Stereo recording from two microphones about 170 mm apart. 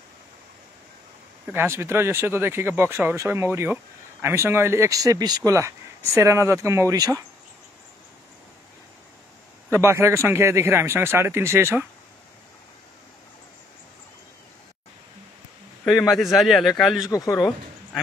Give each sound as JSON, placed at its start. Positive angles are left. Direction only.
{"t": 1.5, "sound": "speech", "side_deg": -15}
{"t": 9.7, "sound": "speech", "side_deg": -15}
{"t": 16.1, "sound": "a man's voice", "side_deg": 0}
{"t": 17.1, "sound": "speech", "side_deg": 20}